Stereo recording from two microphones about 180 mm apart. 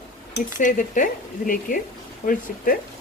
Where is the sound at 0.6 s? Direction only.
45° left (ahead or behind).